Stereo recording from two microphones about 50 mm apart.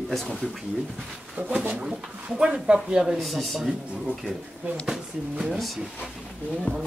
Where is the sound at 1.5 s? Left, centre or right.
Right.